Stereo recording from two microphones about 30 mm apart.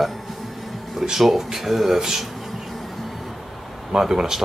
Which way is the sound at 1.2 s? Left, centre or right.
Centre.